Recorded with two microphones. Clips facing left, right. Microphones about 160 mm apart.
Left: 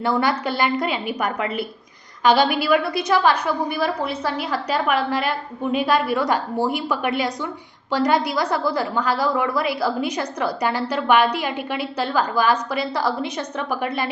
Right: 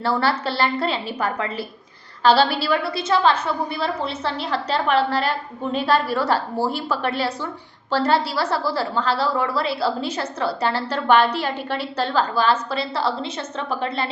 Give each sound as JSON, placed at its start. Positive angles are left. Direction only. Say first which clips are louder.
{"t": 0.0, "sound": "a woman's voice", "louder": "left 1 dB", "side_deg": 15}